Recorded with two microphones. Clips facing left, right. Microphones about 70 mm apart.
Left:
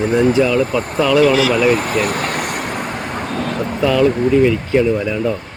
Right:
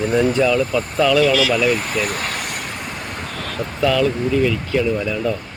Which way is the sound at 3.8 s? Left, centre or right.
Left.